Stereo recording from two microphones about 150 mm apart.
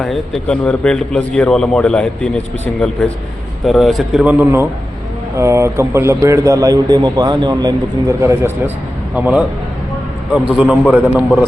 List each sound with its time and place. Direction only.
0.0 s a man's voice: 5° left (ahead or behind)
3.7 s a man's voice: centre (ahead or behind); by 8.4 s 20° right (ahead or behind)
9.1 s a man's voice: 10° right (ahead or behind)
10.5 s a man's voice: 5° right (ahead or behind)